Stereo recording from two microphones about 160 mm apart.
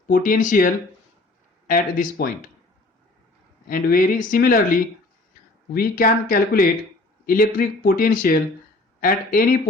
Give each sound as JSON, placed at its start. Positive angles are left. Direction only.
{"t": 0.1, "sound": "speech", "side_deg": 60}
{"t": 3.7, "sound": "speech", "side_deg": 60}